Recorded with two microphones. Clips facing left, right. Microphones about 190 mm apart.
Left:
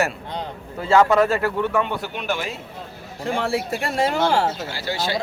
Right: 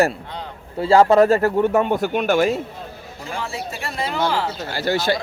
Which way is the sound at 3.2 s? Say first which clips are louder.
Left 6 dB; 60° left (ahead or behind).